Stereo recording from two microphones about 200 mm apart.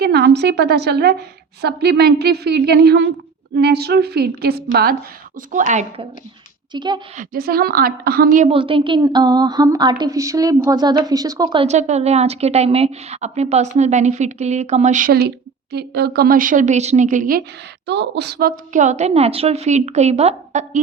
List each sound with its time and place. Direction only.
0.0 s a woman's voice: 55° right (ahead or behind)
5.5 s a woman's voice: 40° right (ahead or behind)
6.7 s a woman's voice: 20° right (ahead or behind)
7.2 s speech: 50° right (ahead or behind)
8.4 s a woman's voice: 25° right (ahead or behind); by 17.4 s 40° right (ahead or behind)
17.8 s a woman's voice: 60° right (ahead or behind); by 20.7 s 35° right (ahead or behind)